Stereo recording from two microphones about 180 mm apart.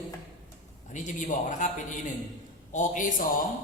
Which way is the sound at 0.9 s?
45° left (ahead or behind).